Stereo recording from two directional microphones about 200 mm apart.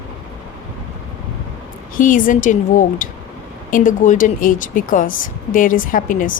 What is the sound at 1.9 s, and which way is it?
A woman's voice, 40° left (ahead or behind).